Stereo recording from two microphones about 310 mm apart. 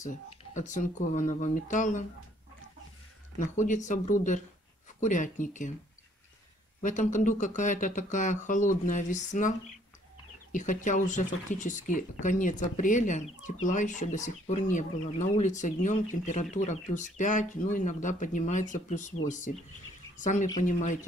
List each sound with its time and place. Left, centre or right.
0.6 s speech: left
3.3 s speech: left
6.8 s speech: left
10.5 s speech: left